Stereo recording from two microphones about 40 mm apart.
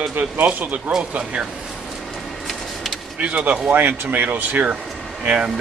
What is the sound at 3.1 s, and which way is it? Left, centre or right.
Speech, right.